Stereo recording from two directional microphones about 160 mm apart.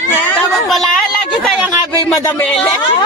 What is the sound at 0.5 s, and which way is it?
Speech, centre (ahead or behind).